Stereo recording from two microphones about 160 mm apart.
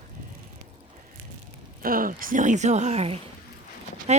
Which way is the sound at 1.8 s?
60° right (ahead or behind).